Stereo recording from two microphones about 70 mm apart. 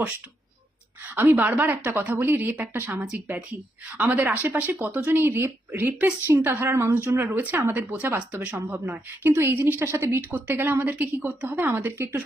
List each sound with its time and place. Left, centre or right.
1.0 s a woman's voice: right
8.3 s a woman's voice: centre